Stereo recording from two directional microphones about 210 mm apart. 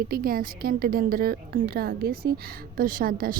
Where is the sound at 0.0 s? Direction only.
45° right (ahead or behind).